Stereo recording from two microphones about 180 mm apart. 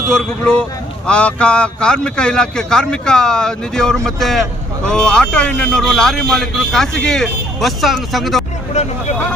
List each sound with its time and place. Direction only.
0.1 s speech: 5° left (ahead or behind)
8.7 s speech: 40° left (ahead or behind)